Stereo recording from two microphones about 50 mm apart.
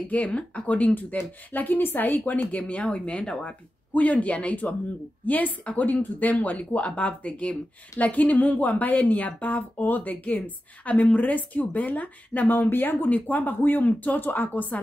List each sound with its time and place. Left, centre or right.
0.1 s a woman's voice: left
3.9 s a woman's voice: left